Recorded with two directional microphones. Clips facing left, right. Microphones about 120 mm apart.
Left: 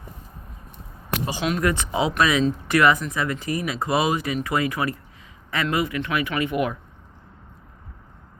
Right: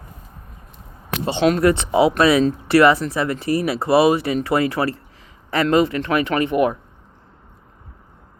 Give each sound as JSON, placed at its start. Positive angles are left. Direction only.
{"t": 1.2, "sound": "speech", "side_deg": -30}